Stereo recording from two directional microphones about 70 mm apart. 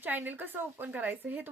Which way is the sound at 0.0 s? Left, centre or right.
Right.